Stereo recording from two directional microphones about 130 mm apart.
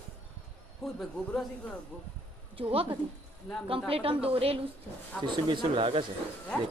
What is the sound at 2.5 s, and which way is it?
Speech, 45° right (ahead or behind).